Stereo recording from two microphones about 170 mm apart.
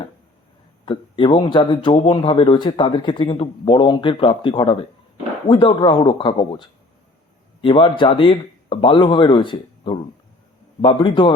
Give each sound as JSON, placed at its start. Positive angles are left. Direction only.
{"t": 0.9, "sound": "speech", "side_deg": 30}